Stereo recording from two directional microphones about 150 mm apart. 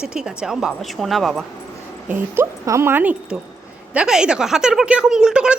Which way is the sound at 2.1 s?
15° right (ahead or behind).